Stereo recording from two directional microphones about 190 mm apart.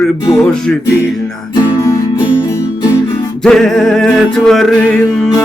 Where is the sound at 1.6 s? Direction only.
25° left (ahead or behind).